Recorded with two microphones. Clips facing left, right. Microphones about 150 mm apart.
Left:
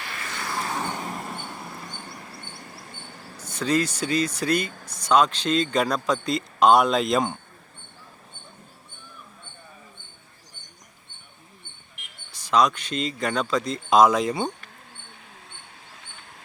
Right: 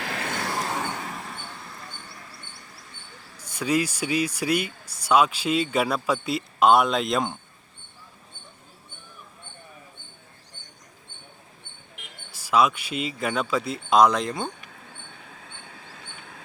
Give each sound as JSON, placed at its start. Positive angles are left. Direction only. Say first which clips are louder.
{"t": 0.0, "sound": "vehicle", "louder": "right 5 dB", "side_deg": -80}
{"t": 0.8, "sound": "vehicle", "louder": "left 1 dB", "side_deg": 10}
{"t": 2.0, "sound": "a sound", "louder": "left 4 dB", "side_deg": 55}
{"t": 3.5, "sound": "speech", "louder": "left 1 dB", "side_deg": -10}
{"t": 12.3, "sound": "speech", "louder": "even", "side_deg": -5}